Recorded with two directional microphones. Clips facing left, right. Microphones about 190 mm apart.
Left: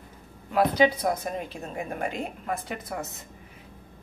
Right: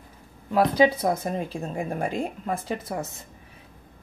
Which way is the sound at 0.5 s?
30° right (ahead or behind).